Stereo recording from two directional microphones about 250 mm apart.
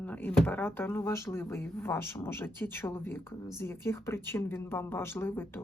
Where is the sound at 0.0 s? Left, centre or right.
Centre.